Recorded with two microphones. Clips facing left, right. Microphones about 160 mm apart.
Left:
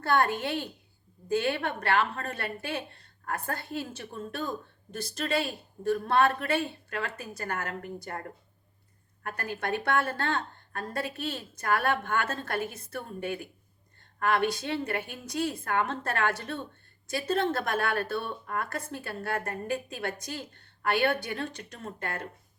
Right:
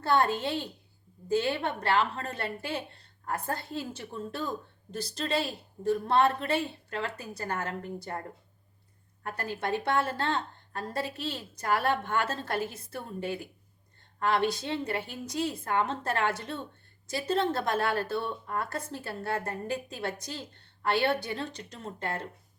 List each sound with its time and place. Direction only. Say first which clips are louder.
0.2 s speech: even; 25° right (ahead or behind)
9.2 s speech: even; 30° right (ahead or behind)